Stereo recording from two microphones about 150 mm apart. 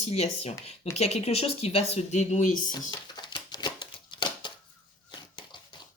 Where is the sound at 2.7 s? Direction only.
25° left (ahead or behind).